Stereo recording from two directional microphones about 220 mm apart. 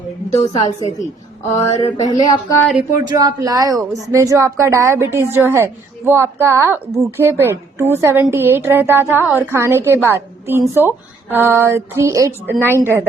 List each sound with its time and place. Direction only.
0.3 s a sound: 15° left (ahead or behind)
2.9 s speech: 35° left (ahead or behind)
3.2 s a woman's voice: 15° right (ahead or behind)